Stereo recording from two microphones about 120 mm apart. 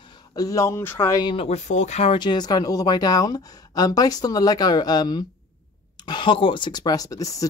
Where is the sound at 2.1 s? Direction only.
35° left (ahead or behind).